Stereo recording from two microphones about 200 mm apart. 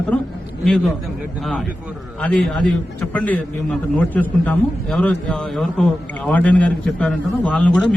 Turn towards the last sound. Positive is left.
turn(degrees=5)  # may be behind; listen again after turning